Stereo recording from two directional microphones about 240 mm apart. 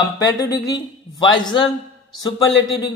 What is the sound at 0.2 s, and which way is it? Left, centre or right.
Speech, centre.